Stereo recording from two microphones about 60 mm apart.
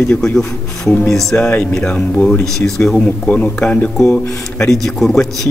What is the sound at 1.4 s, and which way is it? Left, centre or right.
Speech, left.